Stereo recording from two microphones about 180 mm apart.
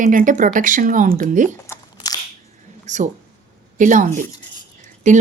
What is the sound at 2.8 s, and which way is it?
Speech, 40° right (ahead or behind).